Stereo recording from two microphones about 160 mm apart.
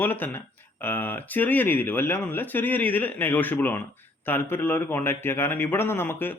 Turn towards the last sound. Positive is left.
turn(degrees=15)  # may be behind; listen again after turning